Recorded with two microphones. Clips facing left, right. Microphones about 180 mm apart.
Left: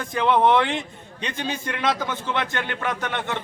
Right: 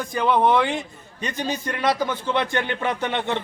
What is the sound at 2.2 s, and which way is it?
Speech, 15° right (ahead or behind).